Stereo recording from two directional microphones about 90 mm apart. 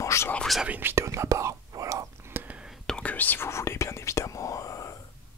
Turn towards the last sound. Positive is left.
turn(degrees=40)  # may be behind; listen again after turning